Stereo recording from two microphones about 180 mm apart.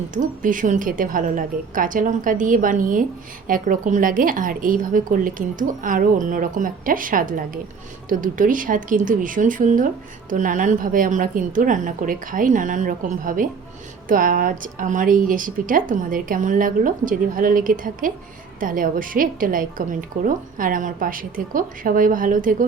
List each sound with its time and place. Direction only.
0.1 s speech: 45° right (ahead or behind)